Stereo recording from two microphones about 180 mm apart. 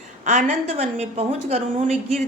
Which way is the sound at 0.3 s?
40° right (ahead or behind).